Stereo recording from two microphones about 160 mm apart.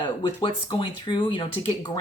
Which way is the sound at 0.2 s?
30° left (ahead or behind).